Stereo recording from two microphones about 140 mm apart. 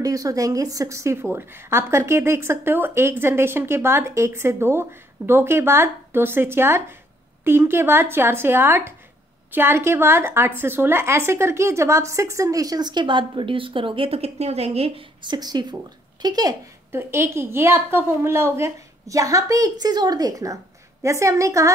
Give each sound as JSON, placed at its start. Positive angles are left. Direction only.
{"t": 0.0, "sound": "a woman's voice", "side_deg": -25}
{"t": 15.2, "sound": "a woman's voice", "side_deg": -30}